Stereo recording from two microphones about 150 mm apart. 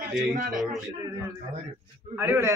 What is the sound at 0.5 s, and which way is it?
Speech, centre (ahead or behind).